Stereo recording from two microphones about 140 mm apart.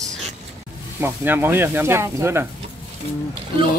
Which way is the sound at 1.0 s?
15° right (ahead or behind).